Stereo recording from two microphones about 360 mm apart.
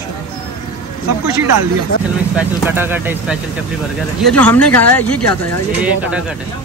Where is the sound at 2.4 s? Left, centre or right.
Centre.